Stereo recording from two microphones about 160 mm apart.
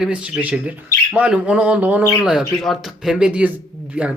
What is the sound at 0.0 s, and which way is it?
Speech, 5° right (ahead or behind).